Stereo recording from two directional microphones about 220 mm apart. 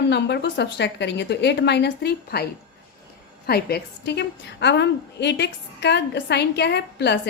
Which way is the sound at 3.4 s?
45° left (ahead or behind).